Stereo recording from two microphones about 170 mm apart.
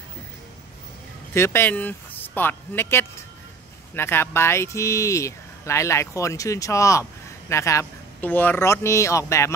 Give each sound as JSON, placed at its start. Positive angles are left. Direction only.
{"t": 1.3, "sound": "speech", "side_deg": 15}